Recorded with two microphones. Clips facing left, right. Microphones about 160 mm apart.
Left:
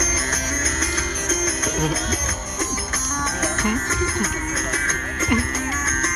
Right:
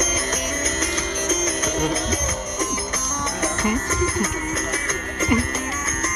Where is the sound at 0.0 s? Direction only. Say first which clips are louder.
Right 2 dB; 20° right (ahead or behind).